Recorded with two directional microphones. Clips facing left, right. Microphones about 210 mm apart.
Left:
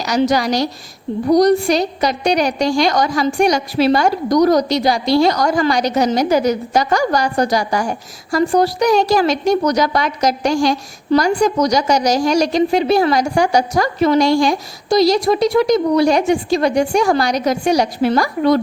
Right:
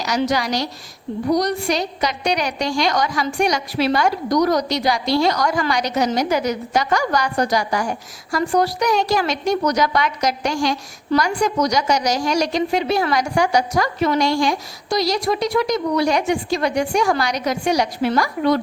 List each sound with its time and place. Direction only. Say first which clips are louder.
0.0 s a woman's voice: left 5 dB; 35° left (ahead or behind)